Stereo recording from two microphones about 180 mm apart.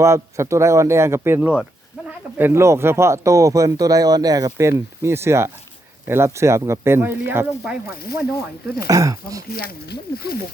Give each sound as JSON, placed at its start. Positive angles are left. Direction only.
{"t": 0.0, "sound": "speech", "side_deg": -15}
{"t": 7.9, "sound": "speech", "side_deg": 55}
{"t": 8.9, "sound": "speech", "side_deg": -20}
{"t": 9.5, "sound": "speech", "side_deg": 55}